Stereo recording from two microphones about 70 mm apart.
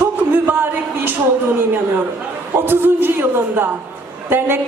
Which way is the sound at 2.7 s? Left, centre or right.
Right.